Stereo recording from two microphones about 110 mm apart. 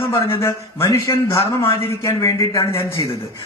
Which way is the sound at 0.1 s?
25° left (ahead or behind).